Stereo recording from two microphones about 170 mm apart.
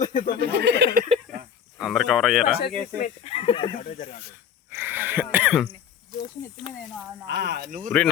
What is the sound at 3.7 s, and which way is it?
Speech, 45° left (ahead or behind).